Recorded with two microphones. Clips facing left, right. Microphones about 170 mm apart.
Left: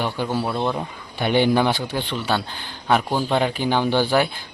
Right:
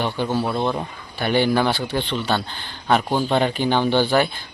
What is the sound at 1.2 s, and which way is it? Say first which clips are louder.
Speech: left 1 dB; 15° left (ahead or behind).